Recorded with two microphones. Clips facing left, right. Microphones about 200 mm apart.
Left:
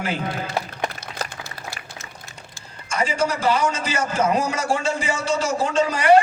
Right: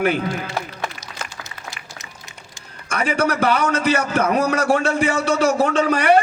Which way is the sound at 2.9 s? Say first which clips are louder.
Right 2 dB; 60° right (ahead or behind).